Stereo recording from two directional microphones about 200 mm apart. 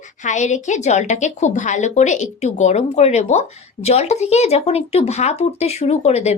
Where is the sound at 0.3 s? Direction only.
35° left (ahead or behind).